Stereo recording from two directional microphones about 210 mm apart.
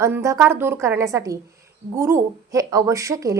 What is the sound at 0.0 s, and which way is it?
A woman's voice, 15° right (ahead or behind).